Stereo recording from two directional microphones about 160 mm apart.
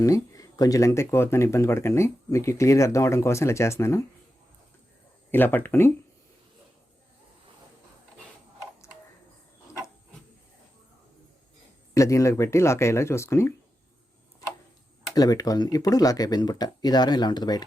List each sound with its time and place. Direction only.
0.0 s speech: 20° left (ahead or behind)
5.3 s speech: 10° left (ahead or behind)
11.9 s speech: 20° left (ahead or behind)
15.1 s speech: 25° left (ahead or behind)